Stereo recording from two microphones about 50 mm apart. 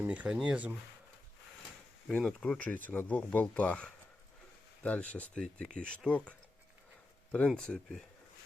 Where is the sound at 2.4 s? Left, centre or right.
Left.